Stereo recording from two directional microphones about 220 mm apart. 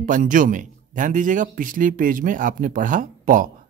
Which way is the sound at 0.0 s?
35° right (ahead or behind).